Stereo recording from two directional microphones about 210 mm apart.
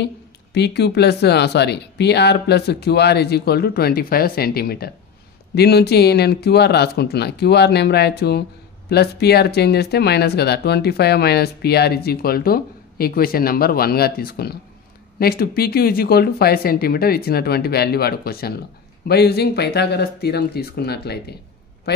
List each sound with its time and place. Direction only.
0.6 s speech: 55° left (ahead or behind)